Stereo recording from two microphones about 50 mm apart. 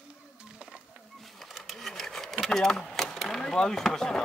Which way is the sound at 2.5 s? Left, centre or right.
Centre.